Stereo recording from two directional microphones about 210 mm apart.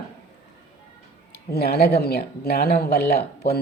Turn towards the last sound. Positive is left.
turn(degrees=50)  # may be behind; listen again after turning